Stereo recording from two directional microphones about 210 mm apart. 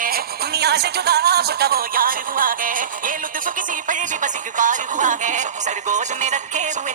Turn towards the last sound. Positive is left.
turn(degrees=-35)  # may be behind; listen again after turning